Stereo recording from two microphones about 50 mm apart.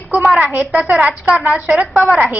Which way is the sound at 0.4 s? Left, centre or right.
Right.